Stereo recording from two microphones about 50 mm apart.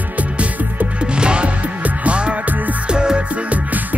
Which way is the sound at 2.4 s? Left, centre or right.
Right.